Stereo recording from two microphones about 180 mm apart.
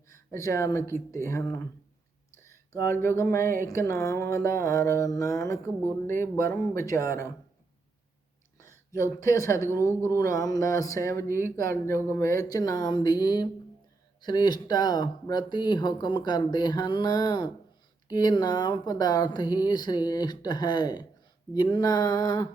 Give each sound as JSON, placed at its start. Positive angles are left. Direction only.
{"t": 0.3, "sound": "mantra", "side_deg": 15}
{"t": 2.3, "sound": "speech", "side_deg": 15}
{"t": 3.7, "sound": "mantra", "side_deg": 15}
{"t": 8.5, "sound": "mantra", "side_deg": 15}
{"t": 11.5, "sound": "speech", "side_deg": 15}